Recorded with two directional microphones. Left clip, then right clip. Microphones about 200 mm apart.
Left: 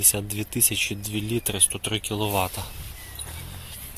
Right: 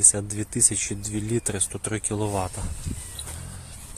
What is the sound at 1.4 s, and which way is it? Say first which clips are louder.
Speech: left 3 dB; 15° right (ahead or behind).